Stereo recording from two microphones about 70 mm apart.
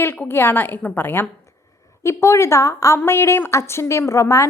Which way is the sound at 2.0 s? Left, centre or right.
Left.